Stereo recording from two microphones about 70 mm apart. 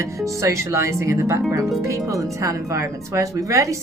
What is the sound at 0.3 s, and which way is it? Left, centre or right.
Speech, right.